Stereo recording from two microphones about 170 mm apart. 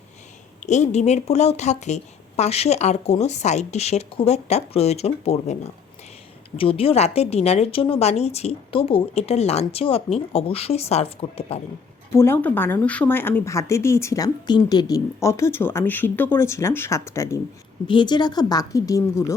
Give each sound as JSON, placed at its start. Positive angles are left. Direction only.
{"t": 0.6, "sound": "a woman's voice", "side_deg": 45}
{"t": 6.6, "sound": "a woman's voice", "side_deg": 35}
{"t": 12.1, "sound": "a woman's voice", "side_deg": 15}